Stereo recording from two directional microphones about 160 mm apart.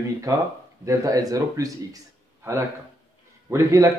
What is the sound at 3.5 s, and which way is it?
Speech, 20° right (ahead or behind).